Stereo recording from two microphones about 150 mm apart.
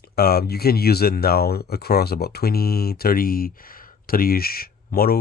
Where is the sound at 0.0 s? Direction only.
90° left.